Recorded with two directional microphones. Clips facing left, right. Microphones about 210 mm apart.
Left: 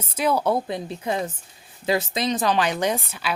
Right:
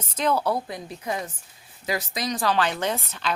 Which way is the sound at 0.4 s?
25° left (ahead or behind).